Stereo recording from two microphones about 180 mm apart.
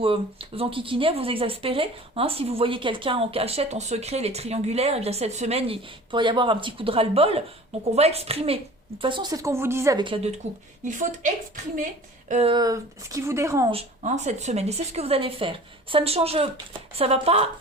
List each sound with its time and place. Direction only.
0.0 s a woman's voice: 30° right (ahead or behind)
10.8 s a woman's voice: 45° right (ahead or behind)
12.5 s speech: 20° right (ahead or behind)
13.7 s speech: 35° right (ahead or behind)